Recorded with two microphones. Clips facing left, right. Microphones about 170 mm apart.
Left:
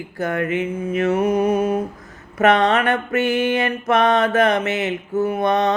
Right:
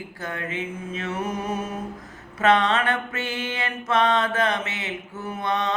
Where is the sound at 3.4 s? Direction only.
65° left (ahead or behind).